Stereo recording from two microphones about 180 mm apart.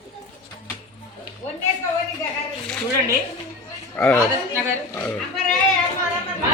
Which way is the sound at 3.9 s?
10° left (ahead or behind).